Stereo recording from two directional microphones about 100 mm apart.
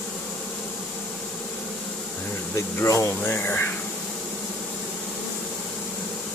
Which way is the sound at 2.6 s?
30° left (ahead or behind).